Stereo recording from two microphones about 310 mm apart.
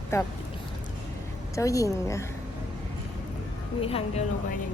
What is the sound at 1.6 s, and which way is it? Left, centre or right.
Speech, centre.